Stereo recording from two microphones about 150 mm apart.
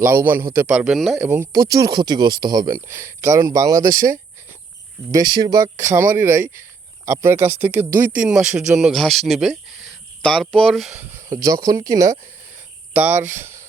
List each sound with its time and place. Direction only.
0.0 s speech: 15° right (ahead or behind); by 1.2 s centre (ahead or behind)
1.2 s speech: 15° right (ahead or behind)
1.5 s speech: 25° right (ahead or behind); by 10.9 s centre (ahead or behind)
11.1 s speech: 20° right (ahead or behind)
12.9 s speech: 15° right (ahead or behind)